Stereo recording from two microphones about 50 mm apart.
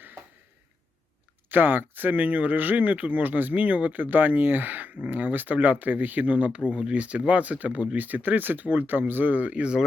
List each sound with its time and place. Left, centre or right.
1.5 s speech: right